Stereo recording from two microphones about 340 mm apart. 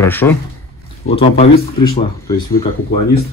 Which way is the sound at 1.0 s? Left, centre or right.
Centre.